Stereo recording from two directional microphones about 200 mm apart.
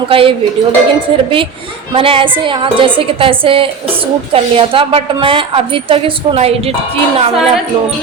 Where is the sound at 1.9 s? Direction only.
25° right (ahead or behind).